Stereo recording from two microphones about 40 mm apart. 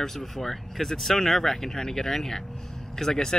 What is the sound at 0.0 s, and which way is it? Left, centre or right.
Speech, centre.